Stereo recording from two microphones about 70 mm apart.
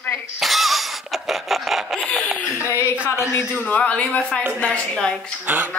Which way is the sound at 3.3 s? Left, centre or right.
Left.